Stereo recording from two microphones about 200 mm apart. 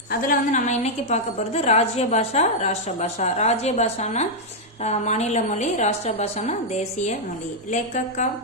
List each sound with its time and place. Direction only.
0.1 s a woman's voice: 40° left (ahead or behind)